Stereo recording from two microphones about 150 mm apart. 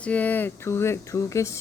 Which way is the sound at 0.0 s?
10° left (ahead or behind).